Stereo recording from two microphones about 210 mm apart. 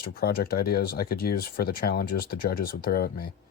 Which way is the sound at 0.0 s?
45° left (ahead or behind).